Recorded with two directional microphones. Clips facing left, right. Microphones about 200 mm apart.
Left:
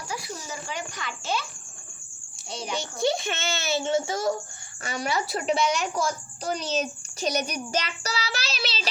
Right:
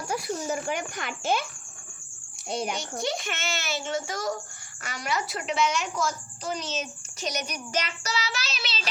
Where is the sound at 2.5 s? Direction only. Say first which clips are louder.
Right 5 dB; 55° right (ahead or behind).